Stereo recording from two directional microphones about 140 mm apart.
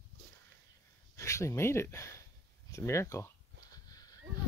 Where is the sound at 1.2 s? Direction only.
20° left (ahead or behind).